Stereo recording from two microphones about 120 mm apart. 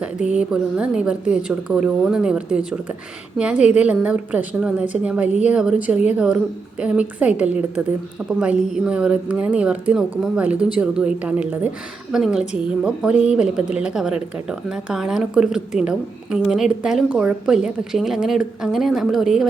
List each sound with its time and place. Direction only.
0.0 s a woman's voice: 10° right (ahead or behind)